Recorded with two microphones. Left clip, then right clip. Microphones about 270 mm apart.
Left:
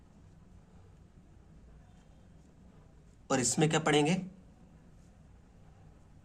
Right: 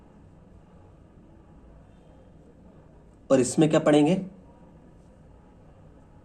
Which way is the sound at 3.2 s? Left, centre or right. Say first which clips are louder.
Right 9 dB; left.